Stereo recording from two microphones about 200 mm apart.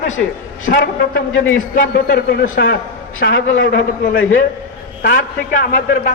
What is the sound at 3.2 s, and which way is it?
A man's voice, 65° left (ahead or behind).